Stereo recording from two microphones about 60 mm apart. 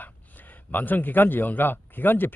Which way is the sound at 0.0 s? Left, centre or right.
Left.